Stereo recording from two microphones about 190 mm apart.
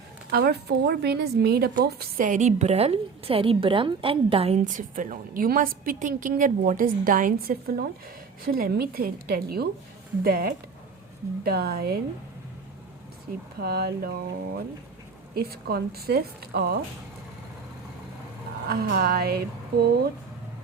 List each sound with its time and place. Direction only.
0.3 s a woman's voice: 55° right (ahead or behind)
13.6 s a woman's voice: 55° right (ahead or behind)
18.7 s a woman's voice: 50° right (ahead or behind)